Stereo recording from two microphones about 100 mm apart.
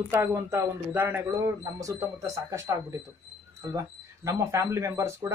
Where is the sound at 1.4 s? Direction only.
35° right (ahead or behind).